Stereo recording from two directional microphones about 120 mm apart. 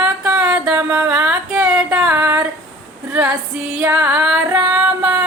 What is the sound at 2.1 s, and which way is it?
Female singing, 20° right (ahead or behind).